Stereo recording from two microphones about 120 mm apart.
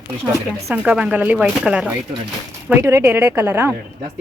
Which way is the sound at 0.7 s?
10° right (ahead or behind).